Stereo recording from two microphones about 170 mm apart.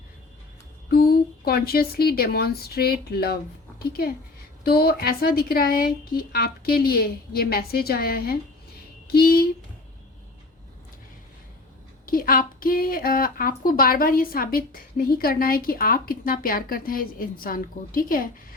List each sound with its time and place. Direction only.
0.9 s a woman's voice: 65° left (ahead or behind)
12.0 s a woman's voice: 60° left (ahead or behind)